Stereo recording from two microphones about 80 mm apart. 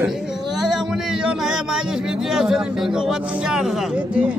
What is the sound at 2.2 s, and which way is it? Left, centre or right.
Speech, centre.